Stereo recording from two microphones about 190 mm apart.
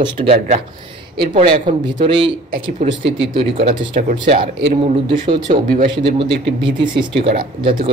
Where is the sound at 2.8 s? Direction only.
50° right (ahead or behind).